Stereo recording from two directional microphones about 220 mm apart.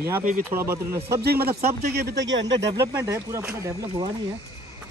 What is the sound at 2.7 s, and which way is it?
Speech, 10° right (ahead or behind).